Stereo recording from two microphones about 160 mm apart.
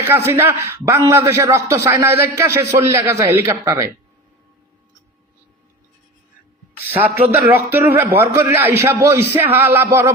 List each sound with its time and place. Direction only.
0.1 s a man's voice: 15° right (ahead or behind)
7.3 s a man's voice: 10° right (ahead or behind)